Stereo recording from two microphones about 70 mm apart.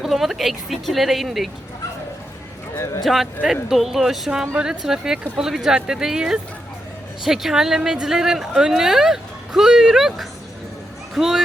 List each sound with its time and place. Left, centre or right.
0.0 s speech: centre
2.7 s speech: left
3.0 s speech: centre